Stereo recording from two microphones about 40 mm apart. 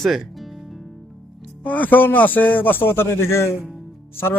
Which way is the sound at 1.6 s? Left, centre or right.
Left.